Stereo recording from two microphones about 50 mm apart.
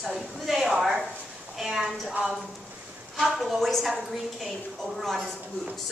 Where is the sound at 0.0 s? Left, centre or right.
Centre.